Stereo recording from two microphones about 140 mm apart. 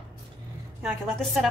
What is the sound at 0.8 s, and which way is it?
Speech, centre (ahead or behind).